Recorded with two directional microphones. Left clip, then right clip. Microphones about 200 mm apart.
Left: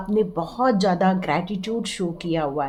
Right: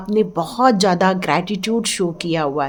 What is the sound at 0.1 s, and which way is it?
A woman's voice, 40° right (ahead or behind).